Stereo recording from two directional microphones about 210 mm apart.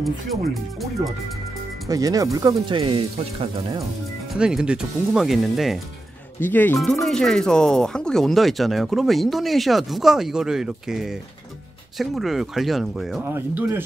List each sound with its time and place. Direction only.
0.0 s speech: centre (ahead or behind)
1.9 s speech: 15° right (ahead or behind)
4.3 s speech: 5° right (ahead or behind)